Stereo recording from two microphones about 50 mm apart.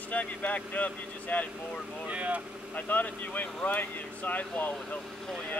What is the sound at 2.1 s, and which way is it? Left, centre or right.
Speech, right.